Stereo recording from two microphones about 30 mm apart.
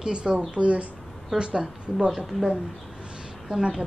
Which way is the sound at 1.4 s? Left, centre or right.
Right.